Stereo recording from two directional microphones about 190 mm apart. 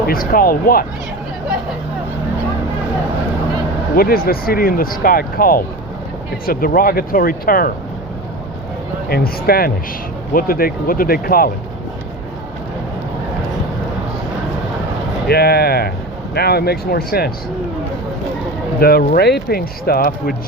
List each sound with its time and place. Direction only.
0.1 s speech: 50° left (ahead or behind)
3.9 s speech: 50° left (ahead or behind)
9.0 s speech: 55° left (ahead or behind)
15.3 s speech: 55° left (ahead or behind)
18.8 s speech: 55° left (ahead or behind)